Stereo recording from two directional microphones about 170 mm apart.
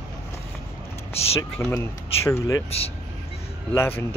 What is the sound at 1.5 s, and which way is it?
Speech, 10° left (ahead or behind).